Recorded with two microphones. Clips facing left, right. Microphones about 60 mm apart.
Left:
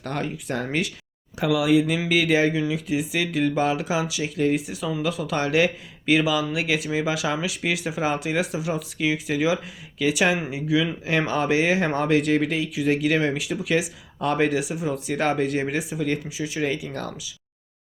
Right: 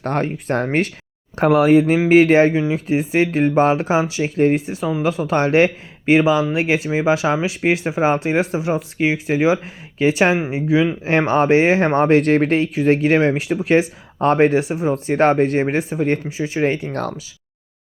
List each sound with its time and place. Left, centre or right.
0.0 s speech: right